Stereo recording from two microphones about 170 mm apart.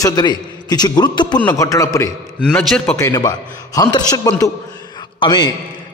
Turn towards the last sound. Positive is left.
turn(degrees=25)  # may be behind; listen again after turning